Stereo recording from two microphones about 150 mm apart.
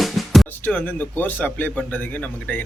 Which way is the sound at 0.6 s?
10° left (ahead or behind).